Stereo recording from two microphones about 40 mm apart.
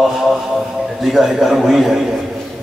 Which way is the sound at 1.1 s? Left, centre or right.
Centre.